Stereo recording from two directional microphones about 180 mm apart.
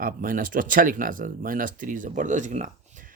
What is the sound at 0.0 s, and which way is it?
Speech, 50° right (ahead or behind).